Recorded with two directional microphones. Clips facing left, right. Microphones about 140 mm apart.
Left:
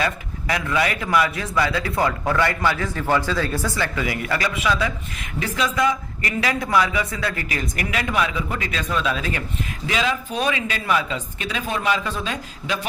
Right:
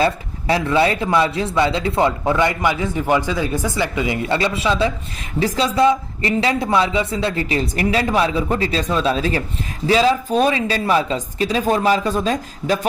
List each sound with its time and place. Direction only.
0.0 s speech: 30° right (ahead or behind)